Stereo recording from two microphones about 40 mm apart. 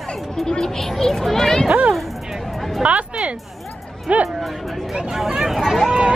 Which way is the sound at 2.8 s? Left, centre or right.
Right.